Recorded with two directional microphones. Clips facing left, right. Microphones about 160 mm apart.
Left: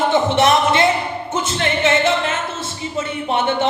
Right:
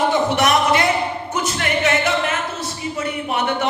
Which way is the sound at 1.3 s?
25° left (ahead or behind).